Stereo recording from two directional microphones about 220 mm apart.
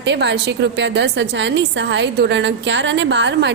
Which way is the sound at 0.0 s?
50° right (ahead or behind).